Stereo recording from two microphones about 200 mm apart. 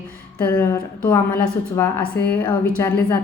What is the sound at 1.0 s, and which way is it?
A woman's voice, 10° left (ahead or behind).